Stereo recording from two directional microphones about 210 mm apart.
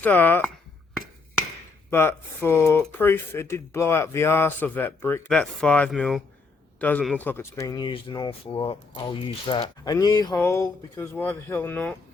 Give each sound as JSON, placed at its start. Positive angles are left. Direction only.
{"t": 0.0, "sound": "speech", "side_deg": 10}
{"t": 1.9, "sound": "speech", "side_deg": 10}